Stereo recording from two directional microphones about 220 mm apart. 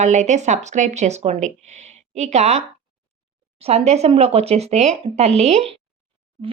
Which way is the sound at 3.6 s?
30° right (ahead or behind).